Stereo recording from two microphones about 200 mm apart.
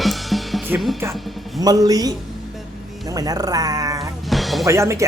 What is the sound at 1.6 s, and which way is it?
A man's voice, 20° right (ahead or behind).